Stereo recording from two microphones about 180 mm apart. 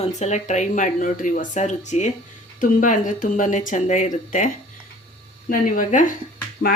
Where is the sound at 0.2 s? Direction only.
40° left (ahead or behind).